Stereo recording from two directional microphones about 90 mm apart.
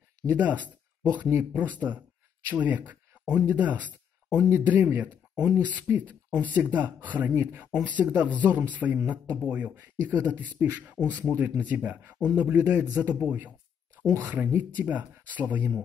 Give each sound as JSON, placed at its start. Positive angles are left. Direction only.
{"t": 0.3, "sound": "speech", "side_deg": -15}